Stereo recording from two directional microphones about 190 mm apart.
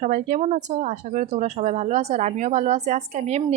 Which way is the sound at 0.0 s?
40° right (ahead or behind).